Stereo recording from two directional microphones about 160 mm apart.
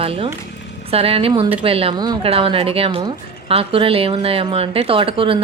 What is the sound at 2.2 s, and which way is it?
A woman's voice, 35° right (ahead or behind).